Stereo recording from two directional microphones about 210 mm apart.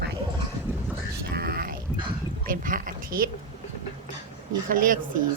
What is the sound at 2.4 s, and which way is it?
Speech, 40° right (ahead or behind).